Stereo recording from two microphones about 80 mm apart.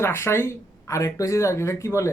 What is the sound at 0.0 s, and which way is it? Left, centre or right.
A man's voice, left.